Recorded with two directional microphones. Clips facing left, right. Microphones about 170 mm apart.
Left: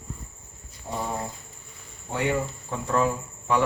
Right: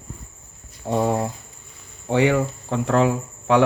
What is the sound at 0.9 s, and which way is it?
Speech, 65° right (ahead or behind).